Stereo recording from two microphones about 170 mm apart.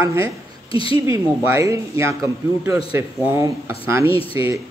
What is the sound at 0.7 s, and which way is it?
Speech, 30° left (ahead or behind).